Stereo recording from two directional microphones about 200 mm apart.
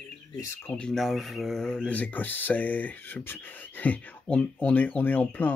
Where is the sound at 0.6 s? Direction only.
5° left (ahead or behind).